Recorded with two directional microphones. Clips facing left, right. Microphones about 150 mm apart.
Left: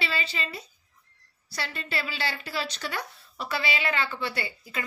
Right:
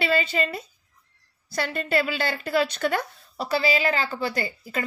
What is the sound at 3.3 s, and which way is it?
Speech, 35° right (ahead or behind).